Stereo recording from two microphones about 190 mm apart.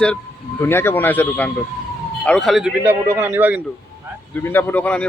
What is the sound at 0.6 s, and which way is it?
A man's voice, 10° left (ahead or behind).